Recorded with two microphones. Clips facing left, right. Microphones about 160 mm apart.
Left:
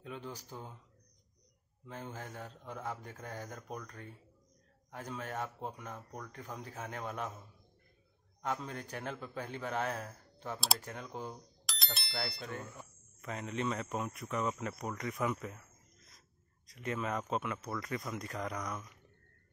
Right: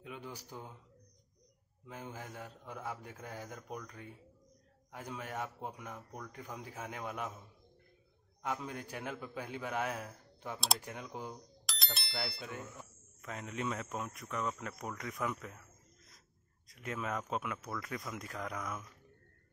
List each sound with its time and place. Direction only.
0.0 s a man's voice: 10° right (ahead or behind)
1.9 s speech: 10° right (ahead or behind)
8.5 s speech: 10° right (ahead or behind)
11.6 s speech: centre (ahead or behind)
16.6 s speech: centre (ahead or behind)